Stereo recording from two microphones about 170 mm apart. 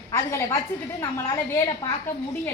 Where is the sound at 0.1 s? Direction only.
20° left (ahead or behind).